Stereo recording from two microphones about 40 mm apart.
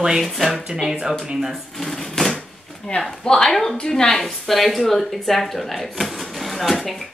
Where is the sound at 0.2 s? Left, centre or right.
Centre.